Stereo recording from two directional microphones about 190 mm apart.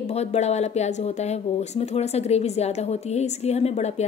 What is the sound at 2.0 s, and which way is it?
A woman's voice, 35° left (ahead or behind).